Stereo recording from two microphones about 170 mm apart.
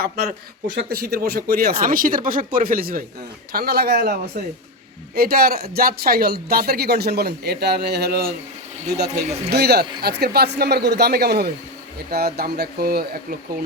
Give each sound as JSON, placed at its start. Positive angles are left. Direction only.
{"t": 0.8, "sound": "speech", "side_deg": -70}